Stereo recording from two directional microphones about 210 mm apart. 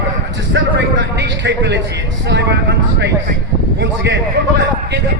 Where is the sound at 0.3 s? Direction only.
55° right (ahead or behind).